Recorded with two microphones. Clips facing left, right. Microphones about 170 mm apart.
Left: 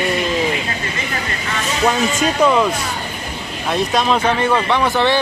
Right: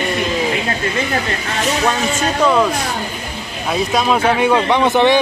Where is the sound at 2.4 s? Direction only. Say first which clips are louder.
Even; centre (ahead or behind).